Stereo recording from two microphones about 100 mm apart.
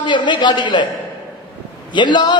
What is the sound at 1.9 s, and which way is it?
Speech, 50° left (ahead or behind).